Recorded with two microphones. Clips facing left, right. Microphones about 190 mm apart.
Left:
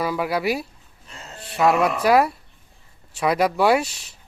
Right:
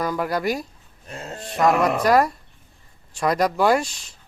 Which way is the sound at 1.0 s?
55° right (ahead or behind).